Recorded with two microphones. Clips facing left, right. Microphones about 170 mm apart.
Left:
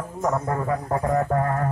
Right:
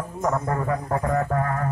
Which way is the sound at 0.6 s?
20° left (ahead or behind).